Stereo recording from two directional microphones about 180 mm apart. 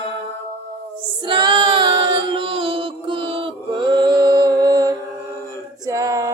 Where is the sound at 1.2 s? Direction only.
25° right (ahead or behind).